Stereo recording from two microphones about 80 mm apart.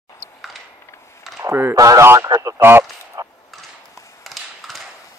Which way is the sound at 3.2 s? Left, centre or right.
Right.